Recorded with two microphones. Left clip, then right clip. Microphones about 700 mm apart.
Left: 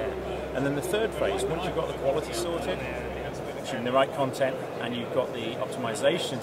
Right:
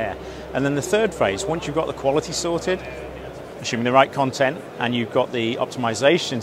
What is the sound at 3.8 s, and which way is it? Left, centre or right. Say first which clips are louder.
A man's voice: right 8 dB; right.